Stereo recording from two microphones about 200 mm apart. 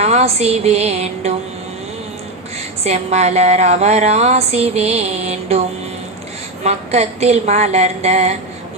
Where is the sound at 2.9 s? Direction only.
35° right (ahead or behind).